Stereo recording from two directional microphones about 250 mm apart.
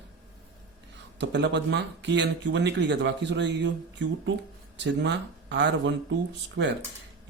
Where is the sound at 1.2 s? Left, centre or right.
Right.